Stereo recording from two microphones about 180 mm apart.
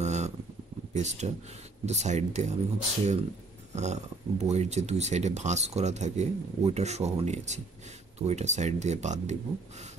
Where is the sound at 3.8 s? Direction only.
40° right (ahead or behind).